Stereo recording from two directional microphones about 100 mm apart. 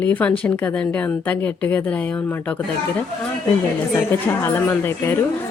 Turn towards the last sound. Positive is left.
turn(degrees=25)  # may be behind; listen again after turning